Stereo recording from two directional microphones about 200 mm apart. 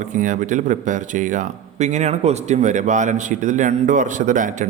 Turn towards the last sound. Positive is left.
turn(degrees=-40)  # may be behind; listen again after turning